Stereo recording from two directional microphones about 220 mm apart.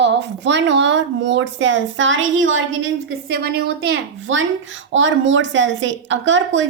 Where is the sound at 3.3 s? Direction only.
45° right (ahead or behind).